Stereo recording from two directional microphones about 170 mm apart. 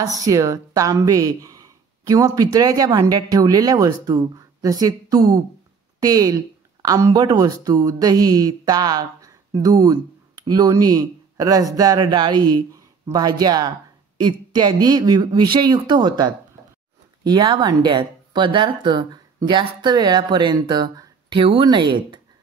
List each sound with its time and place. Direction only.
0.0 s speech: 20° right (ahead or behind)